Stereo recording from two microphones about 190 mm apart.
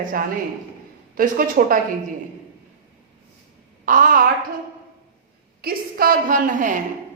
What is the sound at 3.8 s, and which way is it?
Speech, 45° right (ahead or behind).